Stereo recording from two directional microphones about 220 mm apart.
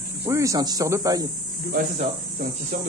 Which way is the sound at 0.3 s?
15° right (ahead or behind).